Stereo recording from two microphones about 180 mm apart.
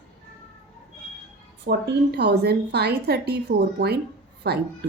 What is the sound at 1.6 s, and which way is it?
A woman's voice, 65° right (ahead or behind).